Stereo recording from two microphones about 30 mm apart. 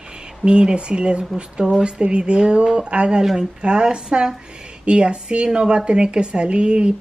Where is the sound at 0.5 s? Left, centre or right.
Right.